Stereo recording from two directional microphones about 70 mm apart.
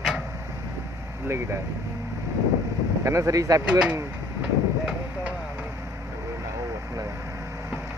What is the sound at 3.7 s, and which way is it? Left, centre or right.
Speech, centre.